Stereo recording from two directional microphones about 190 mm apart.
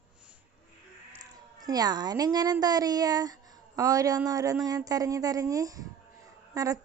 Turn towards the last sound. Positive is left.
turn(degrees=-20)  # may be behind; listen again after turning